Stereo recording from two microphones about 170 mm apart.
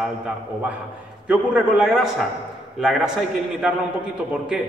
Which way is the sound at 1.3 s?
5° right (ahead or behind).